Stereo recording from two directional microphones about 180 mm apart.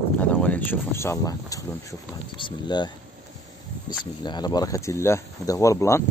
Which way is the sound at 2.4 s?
25° left (ahead or behind).